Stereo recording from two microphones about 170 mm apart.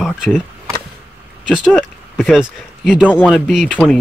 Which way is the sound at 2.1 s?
Centre (ahead or behind).